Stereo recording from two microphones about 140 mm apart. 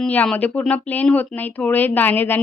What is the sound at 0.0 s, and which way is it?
A woman's voice, 10° left (ahead or behind).